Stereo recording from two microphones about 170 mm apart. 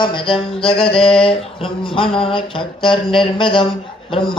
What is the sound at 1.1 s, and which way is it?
Mantra, 35° left (ahead or behind).